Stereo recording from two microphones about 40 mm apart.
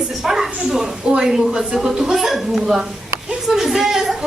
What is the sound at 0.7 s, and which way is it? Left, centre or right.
Speech, centre.